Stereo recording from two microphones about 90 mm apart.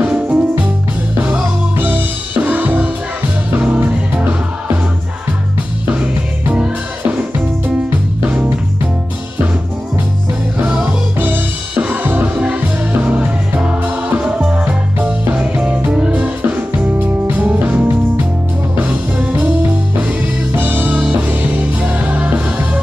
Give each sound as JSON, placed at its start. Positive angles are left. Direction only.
{"t": 0.0, "sound": "music", "side_deg": -15}
{"t": 6.5, "sound": "music", "side_deg": -15}
{"t": 10.6, "sound": "music", "side_deg": -15}
{"t": 19.1, "sound": "music", "side_deg": -15}
{"t": 20.5, "sound": "music", "side_deg": -20}